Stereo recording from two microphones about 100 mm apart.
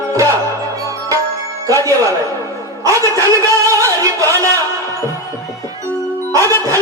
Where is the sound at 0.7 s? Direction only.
35° right (ahead or behind).